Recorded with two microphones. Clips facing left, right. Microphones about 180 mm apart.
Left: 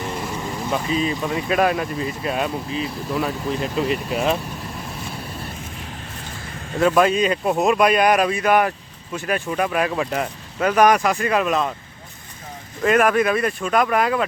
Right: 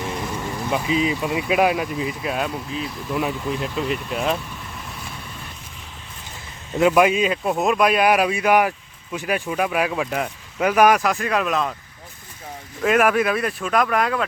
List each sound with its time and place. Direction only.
0.0 s vehicle: 5° left (ahead or behind)
0.7 s speech: 15° right (ahead or behind); by 4.4 s centre (ahead or behind)
6.7 s speech: 15° right (ahead or behind); by 11.7 s centre (ahead or behind)
12.8 s speech: 5° right (ahead or behind)